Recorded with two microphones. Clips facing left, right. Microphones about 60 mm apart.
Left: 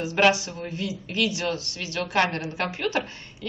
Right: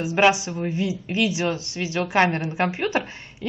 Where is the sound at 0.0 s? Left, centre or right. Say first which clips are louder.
Right 2 dB; centre.